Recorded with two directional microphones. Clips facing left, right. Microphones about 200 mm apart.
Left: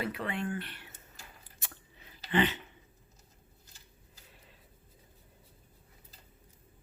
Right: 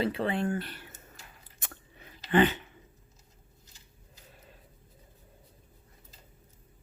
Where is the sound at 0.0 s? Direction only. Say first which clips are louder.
Right 6 dB; 30° right (ahead or behind).